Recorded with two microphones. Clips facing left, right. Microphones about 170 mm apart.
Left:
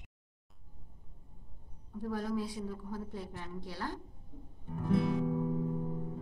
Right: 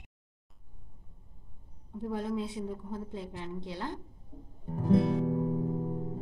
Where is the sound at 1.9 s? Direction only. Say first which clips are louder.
Right 2 dB; 20° right (ahead or behind).